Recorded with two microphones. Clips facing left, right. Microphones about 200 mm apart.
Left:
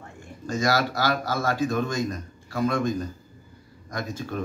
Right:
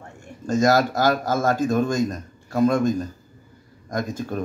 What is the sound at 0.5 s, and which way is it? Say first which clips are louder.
A man's voice: right 6 dB; 45° right (ahead or behind).